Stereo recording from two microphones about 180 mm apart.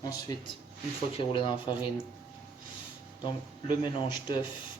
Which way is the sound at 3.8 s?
25° left (ahead or behind).